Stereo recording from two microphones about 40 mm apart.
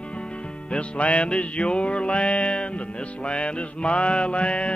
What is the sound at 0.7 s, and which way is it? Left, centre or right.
Music, left.